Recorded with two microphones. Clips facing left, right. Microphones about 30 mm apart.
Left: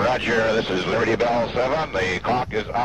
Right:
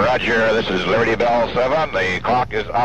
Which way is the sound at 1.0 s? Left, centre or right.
Centre.